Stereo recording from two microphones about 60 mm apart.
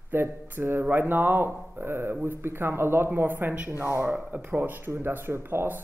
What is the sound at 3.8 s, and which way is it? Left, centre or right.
Speech, right.